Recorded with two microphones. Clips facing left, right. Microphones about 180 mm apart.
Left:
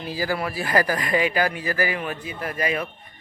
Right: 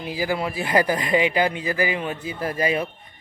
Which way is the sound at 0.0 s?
15° right (ahead or behind).